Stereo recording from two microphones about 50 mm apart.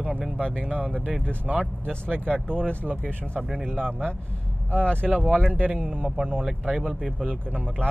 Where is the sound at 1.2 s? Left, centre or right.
Right.